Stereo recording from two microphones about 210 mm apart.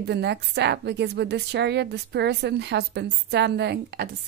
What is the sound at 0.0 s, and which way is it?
A woman's voice, 55° right (ahead or behind).